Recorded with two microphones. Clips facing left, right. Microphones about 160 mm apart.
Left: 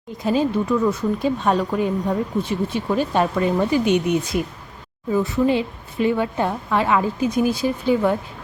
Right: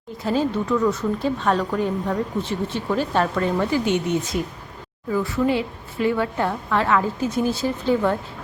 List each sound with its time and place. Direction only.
0.3 s a woman's voice: 10° left (ahead or behind)